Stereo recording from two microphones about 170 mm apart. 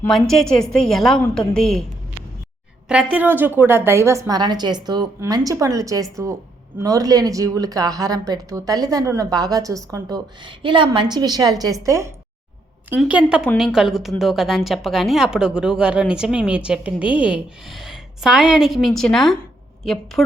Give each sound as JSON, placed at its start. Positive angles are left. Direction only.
{"t": 0.1, "sound": "a woman's voice", "side_deg": 0}
{"t": 2.9, "sound": "a woman's voice", "side_deg": -5}
{"t": 12.9, "sound": "a woman's voice", "side_deg": -5}